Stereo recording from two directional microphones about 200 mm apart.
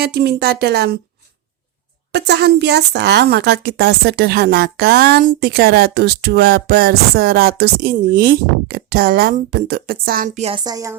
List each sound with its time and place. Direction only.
0.0 s speech: 50° right (ahead or behind)
2.1 s speech: 55° right (ahead or behind)
10.4 s a sound: 25° right (ahead or behind)